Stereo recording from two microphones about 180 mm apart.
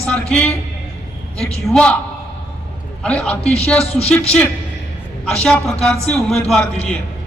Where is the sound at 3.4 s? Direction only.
35° left (ahead or behind).